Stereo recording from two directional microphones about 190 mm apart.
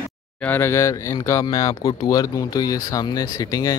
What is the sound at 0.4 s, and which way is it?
Speech, 10° left (ahead or behind).